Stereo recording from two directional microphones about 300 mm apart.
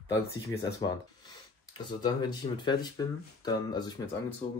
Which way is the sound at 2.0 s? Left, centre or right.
Centre.